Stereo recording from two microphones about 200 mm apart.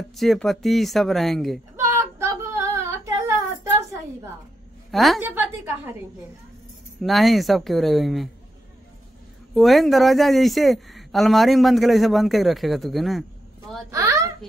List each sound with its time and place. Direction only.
0.1 s speech: centre (ahead or behind)
1.8 s female singing: 15° right (ahead or behind)
4.9 s speech: centre (ahead or behind)
7.0 s speech: centre (ahead or behind)
9.5 s speech: centre (ahead or behind)
13.8 s a sound: 15° right (ahead or behind)